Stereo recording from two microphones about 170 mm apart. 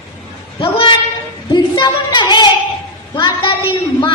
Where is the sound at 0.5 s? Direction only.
30° left (ahead or behind).